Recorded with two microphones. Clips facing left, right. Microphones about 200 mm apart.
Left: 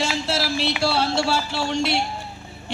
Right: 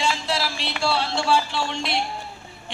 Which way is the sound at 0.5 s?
5° left (ahead or behind).